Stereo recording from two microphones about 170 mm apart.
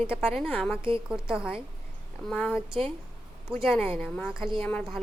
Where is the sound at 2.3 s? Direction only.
10° left (ahead or behind).